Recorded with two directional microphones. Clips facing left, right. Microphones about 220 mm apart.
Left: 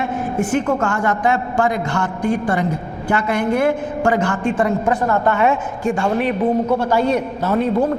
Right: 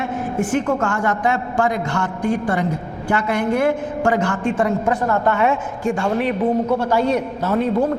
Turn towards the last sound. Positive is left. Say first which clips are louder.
# left 1 dB
turn(degrees=15)  # may be behind; listen again after turning